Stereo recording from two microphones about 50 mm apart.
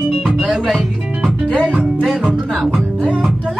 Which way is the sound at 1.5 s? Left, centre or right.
Right.